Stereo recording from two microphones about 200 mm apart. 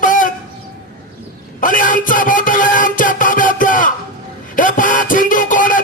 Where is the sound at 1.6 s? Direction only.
40° left (ahead or behind).